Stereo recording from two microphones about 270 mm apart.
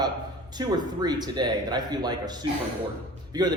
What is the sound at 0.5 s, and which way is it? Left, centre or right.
A man's voice, centre.